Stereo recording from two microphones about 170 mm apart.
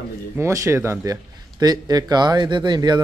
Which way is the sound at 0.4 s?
15° right (ahead or behind).